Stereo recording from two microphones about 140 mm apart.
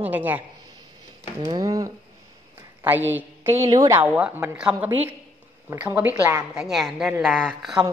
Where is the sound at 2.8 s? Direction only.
15° right (ahead or behind).